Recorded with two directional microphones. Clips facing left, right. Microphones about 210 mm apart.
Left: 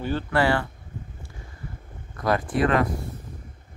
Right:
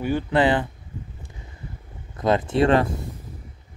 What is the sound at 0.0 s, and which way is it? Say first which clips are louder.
Speech: right 3 dB; 15° right (ahead or behind).